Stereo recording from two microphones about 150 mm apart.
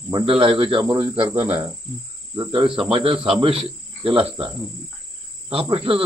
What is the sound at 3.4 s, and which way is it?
Insect, 40° right (ahead or behind).